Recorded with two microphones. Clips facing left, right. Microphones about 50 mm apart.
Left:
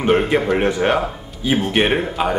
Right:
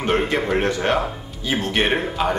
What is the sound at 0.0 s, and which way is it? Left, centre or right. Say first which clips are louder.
Speech: left 4 dB; centre.